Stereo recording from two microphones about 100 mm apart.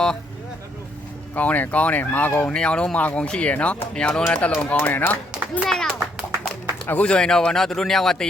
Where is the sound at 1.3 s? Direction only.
15° left (ahead or behind).